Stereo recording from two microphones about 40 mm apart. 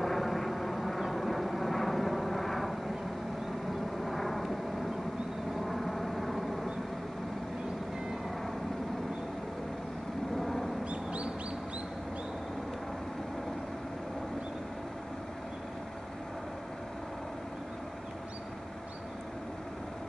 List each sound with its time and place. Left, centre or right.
0.0 s vehicle: centre
4.0 s vehicle: centre
5.6 s vehicle: centre
10.4 s vehicle: centre
10.9 s bird: right